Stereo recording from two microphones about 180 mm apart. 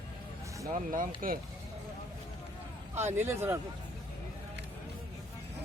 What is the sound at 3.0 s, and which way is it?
Speech, 10° right (ahead or behind).